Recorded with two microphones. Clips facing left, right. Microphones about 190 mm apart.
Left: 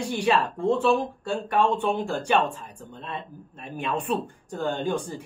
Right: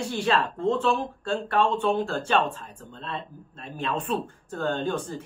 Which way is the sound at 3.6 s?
15° left (ahead or behind).